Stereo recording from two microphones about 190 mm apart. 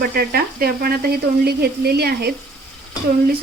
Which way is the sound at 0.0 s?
55° right (ahead or behind).